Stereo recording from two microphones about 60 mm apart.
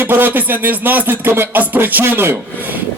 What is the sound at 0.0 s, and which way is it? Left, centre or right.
A man's voice, right.